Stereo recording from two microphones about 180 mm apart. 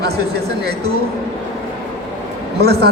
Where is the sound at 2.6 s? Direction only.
60° right (ahead or behind).